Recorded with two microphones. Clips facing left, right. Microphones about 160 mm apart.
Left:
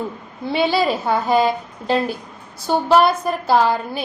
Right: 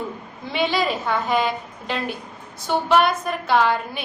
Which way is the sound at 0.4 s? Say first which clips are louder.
Left 4 dB; 35° left (ahead or behind).